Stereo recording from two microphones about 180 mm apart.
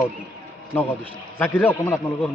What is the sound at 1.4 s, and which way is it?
Speech, 10° left (ahead or behind).